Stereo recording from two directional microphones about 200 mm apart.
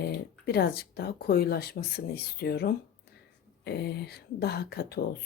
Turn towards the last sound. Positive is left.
turn(degrees=55)  # may be behind; listen again after turning